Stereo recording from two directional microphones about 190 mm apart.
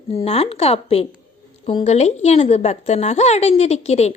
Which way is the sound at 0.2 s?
30° left (ahead or behind).